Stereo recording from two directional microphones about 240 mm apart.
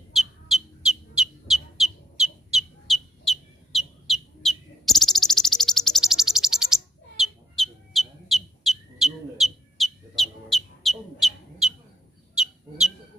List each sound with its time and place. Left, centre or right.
0.1 s music: centre
12.4 s bird: centre